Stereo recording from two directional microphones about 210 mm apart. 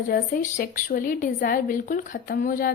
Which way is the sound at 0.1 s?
45° left (ahead or behind).